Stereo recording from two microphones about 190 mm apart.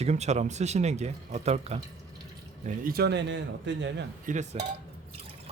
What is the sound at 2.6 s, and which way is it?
A man's voice, 50° right (ahead or behind).